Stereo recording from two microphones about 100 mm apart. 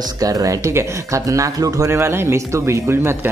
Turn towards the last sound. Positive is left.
turn(degrees=-25)  # may be behind; listen again after turning